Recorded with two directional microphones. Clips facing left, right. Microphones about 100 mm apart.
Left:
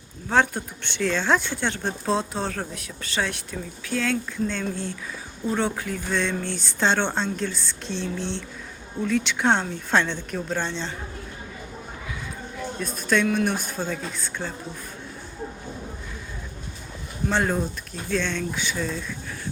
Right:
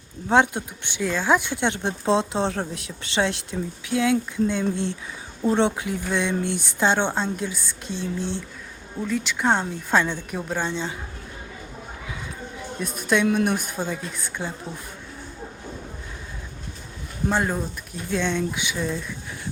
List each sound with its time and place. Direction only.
0.3 s speech: 20° right (ahead or behind)
12.8 s speech: 15° right (ahead or behind)
17.3 s speech: 5° right (ahead or behind)
18.1 s speech: 15° right (ahead or behind)